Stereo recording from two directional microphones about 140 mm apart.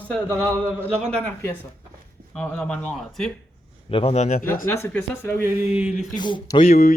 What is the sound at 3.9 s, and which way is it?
Speech, 45° left (ahead or behind).